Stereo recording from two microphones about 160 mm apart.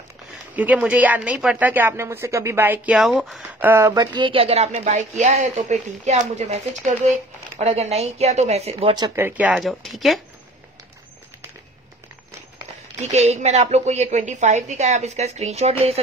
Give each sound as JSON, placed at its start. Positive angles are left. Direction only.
{"t": 0.6, "sound": "speech", "side_deg": -10}
{"t": 3.5, "sound": "a woman's voice", "side_deg": -15}
{"t": 8.9, "sound": "speech", "side_deg": -20}
{"t": 13.0, "sound": "a woman's voice", "side_deg": -45}